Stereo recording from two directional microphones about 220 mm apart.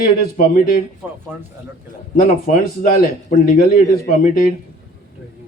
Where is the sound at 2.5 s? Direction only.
40° left (ahead or behind).